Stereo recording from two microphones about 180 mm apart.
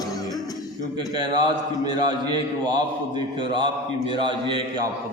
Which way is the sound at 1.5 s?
25° right (ahead or behind).